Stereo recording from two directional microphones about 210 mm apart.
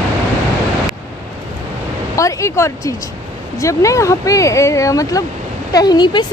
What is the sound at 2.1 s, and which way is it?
Speech, 15° left (ahead or behind).